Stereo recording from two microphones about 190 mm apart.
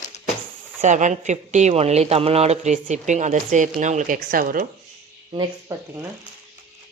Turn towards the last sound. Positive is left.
turn(degrees=-25)  # may be behind; listen again after turning